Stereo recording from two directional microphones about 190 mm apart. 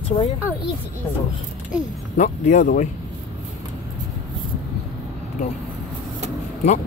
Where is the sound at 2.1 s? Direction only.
40° left (ahead or behind).